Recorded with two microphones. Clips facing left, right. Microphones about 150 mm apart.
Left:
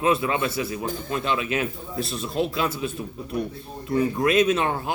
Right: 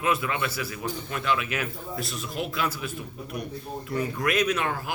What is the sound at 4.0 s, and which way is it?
Speech, 25° left (ahead or behind).